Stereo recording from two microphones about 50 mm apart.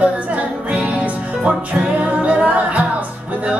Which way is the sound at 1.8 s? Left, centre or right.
Right.